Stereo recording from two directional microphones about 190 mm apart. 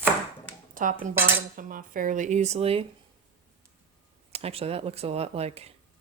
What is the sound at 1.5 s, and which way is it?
Speech, 45° right (ahead or behind).